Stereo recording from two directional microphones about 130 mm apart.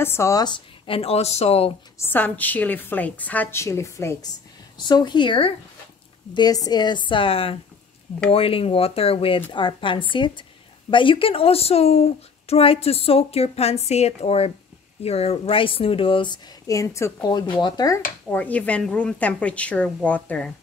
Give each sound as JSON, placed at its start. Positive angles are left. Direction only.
{"t": 0.0, "sound": "speech", "side_deg": 20}
{"t": 0.8, "sound": "speech", "side_deg": 45}
{"t": 2.0, "sound": "a woman's voice", "side_deg": 15}
{"t": 4.7, "sound": "a woman's voice", "side_deg": 35}
{"t": 18.3, "sound": "a woman's voice", "side_deg": 10}